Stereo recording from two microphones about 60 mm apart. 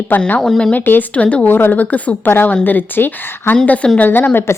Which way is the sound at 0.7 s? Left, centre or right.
Left.